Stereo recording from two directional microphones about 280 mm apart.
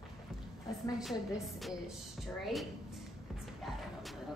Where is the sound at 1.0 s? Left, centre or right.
Centre.